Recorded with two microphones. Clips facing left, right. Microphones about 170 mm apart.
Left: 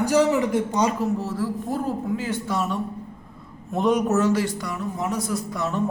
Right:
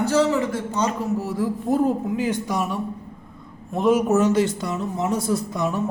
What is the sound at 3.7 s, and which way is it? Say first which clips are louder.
Speech: right 2 dB; centre (ahead or behind).